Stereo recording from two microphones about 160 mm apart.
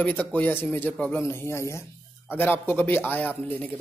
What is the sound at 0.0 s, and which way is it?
Speech, 10° left (ahead or behind).